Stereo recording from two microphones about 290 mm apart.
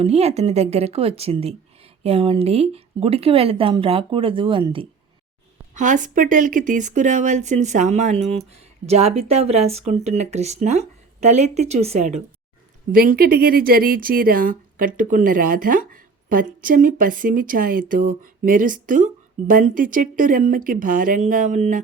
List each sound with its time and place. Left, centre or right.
0.0 s speech: right